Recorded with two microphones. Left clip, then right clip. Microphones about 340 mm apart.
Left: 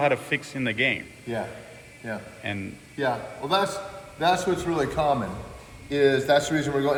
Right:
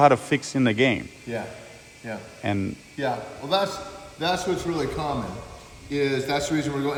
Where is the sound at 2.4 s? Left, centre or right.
Centre.